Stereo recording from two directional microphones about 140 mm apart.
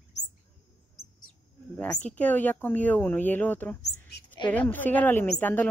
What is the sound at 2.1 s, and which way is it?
A woman's voice, 10° left (ahead or behind).